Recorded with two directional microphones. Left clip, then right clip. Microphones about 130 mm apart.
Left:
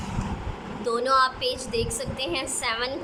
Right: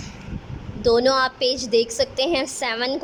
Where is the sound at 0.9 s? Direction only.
55° right (ahead or behind).